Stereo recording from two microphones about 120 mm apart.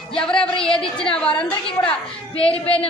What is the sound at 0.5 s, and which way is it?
Speech, 50° left (ahead or behind).